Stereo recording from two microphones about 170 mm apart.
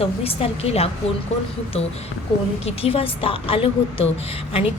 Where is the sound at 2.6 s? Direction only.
35° left (ahead or behind).